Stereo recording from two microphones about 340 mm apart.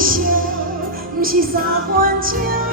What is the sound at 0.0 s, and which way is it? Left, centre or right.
Music, right.